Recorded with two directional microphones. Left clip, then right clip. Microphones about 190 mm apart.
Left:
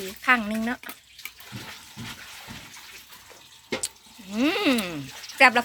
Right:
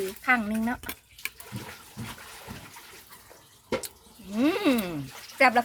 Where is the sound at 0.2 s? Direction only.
Centre (ahead or behind).